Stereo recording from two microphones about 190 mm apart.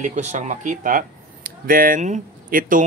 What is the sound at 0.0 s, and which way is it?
Speech, 40° right (ahead or behind).